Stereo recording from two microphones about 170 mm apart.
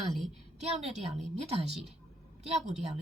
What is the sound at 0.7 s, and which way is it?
A woman's voice, 40° right (ahead or behind).